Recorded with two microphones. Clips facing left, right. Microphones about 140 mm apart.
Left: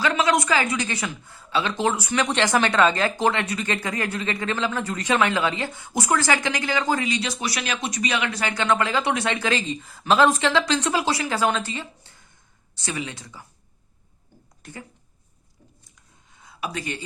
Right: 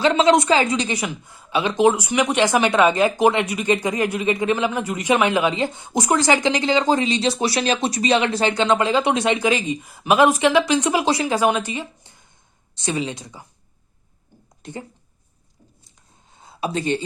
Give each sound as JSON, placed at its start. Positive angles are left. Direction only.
{"t": 0.0, "sound": "speech", "side_deg": -25}
{"t": 14.6, "sound": "speech", "side_deg": -20}
{"t": 16.3, "sound": "a sound", "side_deg": -30}